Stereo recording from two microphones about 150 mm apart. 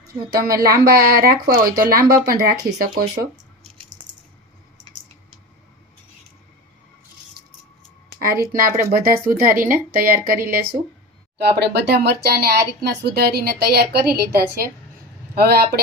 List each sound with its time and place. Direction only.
0.3 s speech: 90° right
8.2 s speech: 80° right
11.3 s speech: 90° right